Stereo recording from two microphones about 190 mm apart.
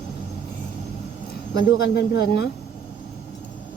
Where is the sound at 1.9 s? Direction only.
60° left (ahead or behind).